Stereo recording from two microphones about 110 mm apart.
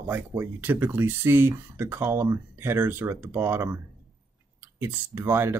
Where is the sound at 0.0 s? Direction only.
20° right (ahead or behind).